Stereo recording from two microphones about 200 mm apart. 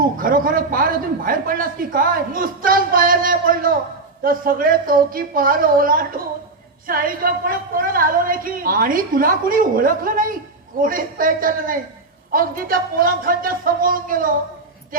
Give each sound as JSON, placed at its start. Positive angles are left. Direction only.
{"t": 0.0, "sound": "speech", "side_deg": -45}